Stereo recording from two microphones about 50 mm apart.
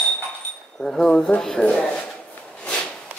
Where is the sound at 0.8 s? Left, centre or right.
Centre.